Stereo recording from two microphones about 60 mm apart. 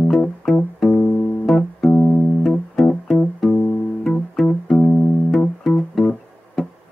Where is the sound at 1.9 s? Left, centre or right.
Left.